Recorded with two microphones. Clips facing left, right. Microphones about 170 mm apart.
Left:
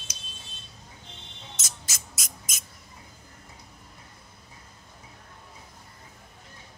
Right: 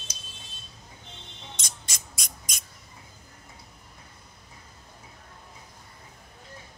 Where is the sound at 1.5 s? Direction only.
5° left (ahead or behind).